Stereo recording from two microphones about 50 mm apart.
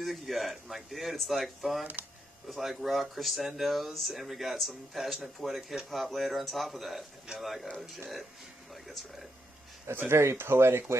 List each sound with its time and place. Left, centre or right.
0.0 s speech: centre
10.0 s speech: right